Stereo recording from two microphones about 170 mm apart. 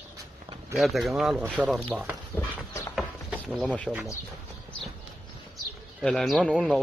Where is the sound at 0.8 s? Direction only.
Centre (ahead or behind).